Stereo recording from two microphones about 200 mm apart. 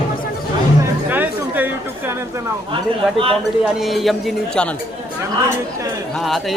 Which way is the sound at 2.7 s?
25° right (ahead or behind).